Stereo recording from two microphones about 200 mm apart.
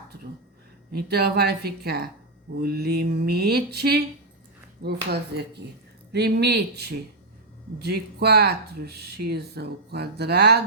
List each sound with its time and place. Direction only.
0.9 s speech: 55° right (ahead or behind)
6.1 s speech: 55° right (ahead or behind)